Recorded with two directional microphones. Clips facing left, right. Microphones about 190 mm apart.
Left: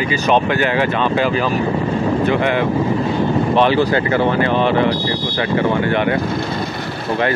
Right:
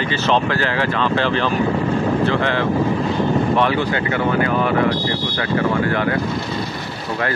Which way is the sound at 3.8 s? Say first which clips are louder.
Left 5 dB; 35° left (ahead or behind).